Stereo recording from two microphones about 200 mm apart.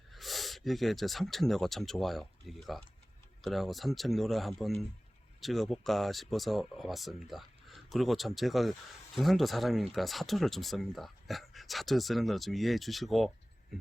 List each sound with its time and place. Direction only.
0.1 s speech: centre (ahead or behind)